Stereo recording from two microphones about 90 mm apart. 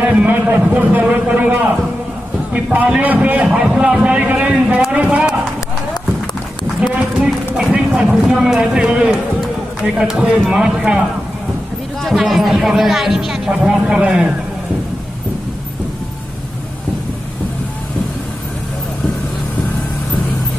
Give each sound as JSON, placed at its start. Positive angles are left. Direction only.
{"t": 0.1, "sound": "a man's voice", "side_deg": -15}
{"t": 7.2, "sound": "a man's voice", "side_deg": -10}
{"t": 12.0, "sound": "speech", "side_deg": 0}